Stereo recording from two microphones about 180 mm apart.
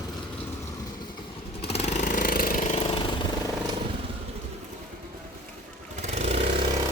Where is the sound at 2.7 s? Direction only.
30° left (ahead or behind).